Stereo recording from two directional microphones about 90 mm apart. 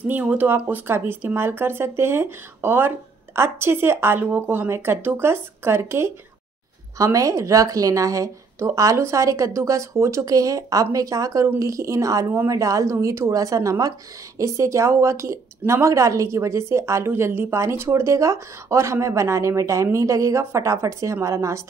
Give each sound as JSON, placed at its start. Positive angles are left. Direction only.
{"t": 0.0, "sound": "a woman's voice", "side_deg": -20}